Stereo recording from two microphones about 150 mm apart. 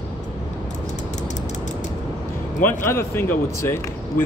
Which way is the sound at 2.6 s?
15° left (ahead or behind).